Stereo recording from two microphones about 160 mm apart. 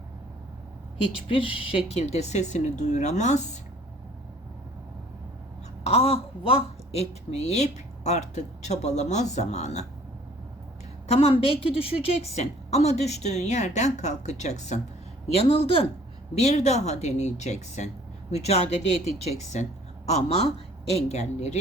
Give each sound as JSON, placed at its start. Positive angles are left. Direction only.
{"t": 1.3, "sound": "a woman's voice", "side_deg": 35}
{"t": 5.8, "sound": "a woman's voice", "side_deg": 40}
{"t": 11.1, "sound": "a woman's voice", "side_deg": 40}
{"t": 20.1, "sound": "a woman's voice", "side_deg": 40}